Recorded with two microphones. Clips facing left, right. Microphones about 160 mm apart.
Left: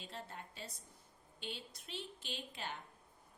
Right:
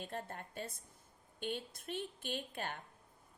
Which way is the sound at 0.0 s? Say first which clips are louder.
Right 5 dB; 50° right (ahead or behind).